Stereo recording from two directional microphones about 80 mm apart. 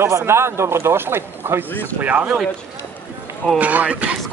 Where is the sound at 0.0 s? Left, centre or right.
Right; by 2.4 s centre.